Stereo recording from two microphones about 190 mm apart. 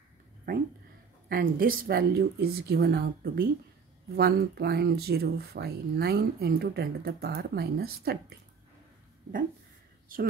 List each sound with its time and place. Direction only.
1.3 s speech: 50° right (ahead or behind)
10.1 s speech: 45° right (ahead or behind)